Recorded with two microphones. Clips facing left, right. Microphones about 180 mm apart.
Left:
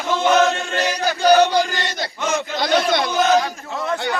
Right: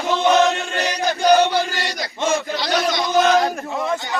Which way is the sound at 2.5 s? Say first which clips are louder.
Left 2 dB; 55° left (ahead or behind).